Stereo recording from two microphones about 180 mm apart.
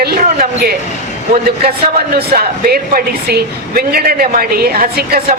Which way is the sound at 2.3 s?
55° right (ahead or behind).